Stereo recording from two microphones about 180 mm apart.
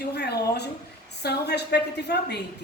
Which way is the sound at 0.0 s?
65° left (ahead or behind).